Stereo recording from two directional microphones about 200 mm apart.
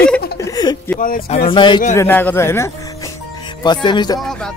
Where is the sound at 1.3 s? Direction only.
25° left (ahead or behind).